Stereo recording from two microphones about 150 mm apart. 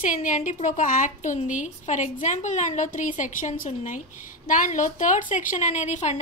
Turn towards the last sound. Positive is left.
turn(degrees=55)  # may be behind; listen again after turning